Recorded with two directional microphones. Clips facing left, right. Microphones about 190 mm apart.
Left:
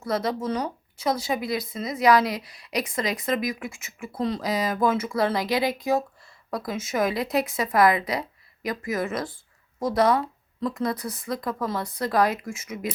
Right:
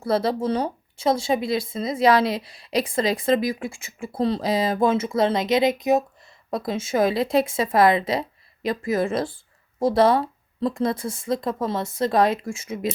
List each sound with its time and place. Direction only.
0.0 s speech: 30° right (ahead or behind)